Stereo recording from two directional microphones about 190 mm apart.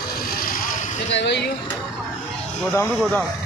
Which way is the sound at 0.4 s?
50° left (ahead or behind).